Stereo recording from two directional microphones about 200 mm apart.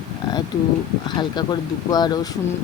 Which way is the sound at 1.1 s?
20° left (ahead or behind).